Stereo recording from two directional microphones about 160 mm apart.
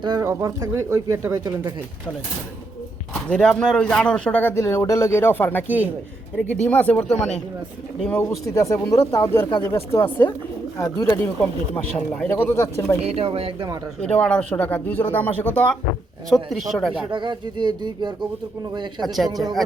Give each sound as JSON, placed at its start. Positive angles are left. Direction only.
{"t": 0.0, "sound": "speech", "side_deg": -25}
{"t": 3.2, "sound": "speech", "side_deg": 5}
{"t": 5.6, "sound": "a man's voice", "side_deg": -10}
{"t": 6.5, "sound": "speech", "side_deg": 10}
{"t": 8.1, "sound": "speech", "side_deg": 20}
{"t": 13.0, "sound": "speech", "side_deg": -40}
{"t": 14.0, "sound": "speech", "side_deg": 5}
{"t": 17.1, "sound": "speech", "side_deg": -30}
{"t": 19.0, "sound": "speech", "side_deg": 0}